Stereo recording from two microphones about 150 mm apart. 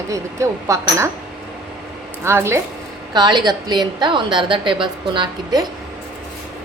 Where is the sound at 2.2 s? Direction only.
15° right (ahead or behind).